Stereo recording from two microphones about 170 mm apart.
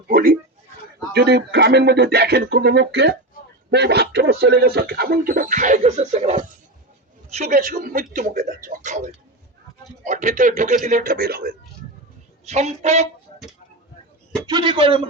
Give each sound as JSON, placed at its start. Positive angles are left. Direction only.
{"t": 0.1, "sound": "a sound", "side_deg": -55}
{"t": 1.1, "sound": "speech", "side_deg": -80}
{"t": 7.5, "sound": "speech", "side_deg": -55}
{"t": 12.5, "sound": "speech", "side_deg": -40}
{"t": 14.4, "sound": "a man's voice", "side_deg": -30}